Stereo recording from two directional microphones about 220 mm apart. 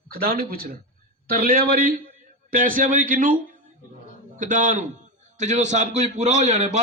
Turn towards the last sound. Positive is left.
turn(degrees=-30)  # may be behind; listen again after turning